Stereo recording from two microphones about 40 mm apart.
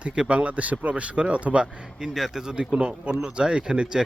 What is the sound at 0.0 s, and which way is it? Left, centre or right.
Speech, right.